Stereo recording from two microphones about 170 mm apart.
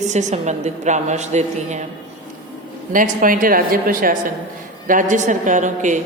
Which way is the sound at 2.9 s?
55° right (ahead or behind).